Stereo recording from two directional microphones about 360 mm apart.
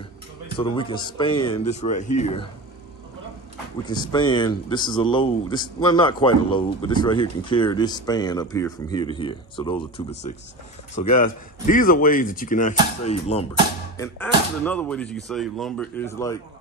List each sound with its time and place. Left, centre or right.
0.6 s speech: centre
3.8 s speech: centre
11.1 s speech: left
13.9 s speech: centre